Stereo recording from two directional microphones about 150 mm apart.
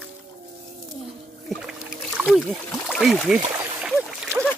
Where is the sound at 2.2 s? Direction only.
Centre (ahead or behind).